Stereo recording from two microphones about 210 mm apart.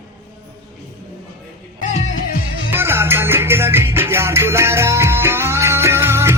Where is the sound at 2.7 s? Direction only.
10° right (ahead or behind).